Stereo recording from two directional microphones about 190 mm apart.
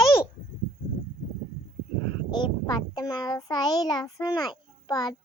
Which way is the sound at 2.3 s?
25° left (ahead or behind).